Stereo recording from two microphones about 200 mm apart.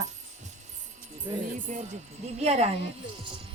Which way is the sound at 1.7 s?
35° right (ahead or behind).